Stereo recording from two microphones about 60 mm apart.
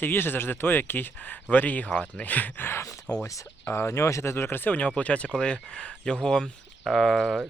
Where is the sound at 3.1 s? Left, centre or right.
Left.